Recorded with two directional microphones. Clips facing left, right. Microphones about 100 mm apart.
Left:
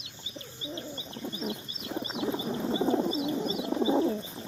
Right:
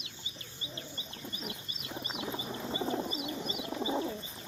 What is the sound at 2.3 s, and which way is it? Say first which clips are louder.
Frog: left 7 dB; 15° left (ahead or behind).